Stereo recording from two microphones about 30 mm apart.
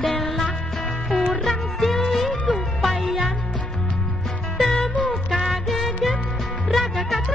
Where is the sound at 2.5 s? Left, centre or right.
Left.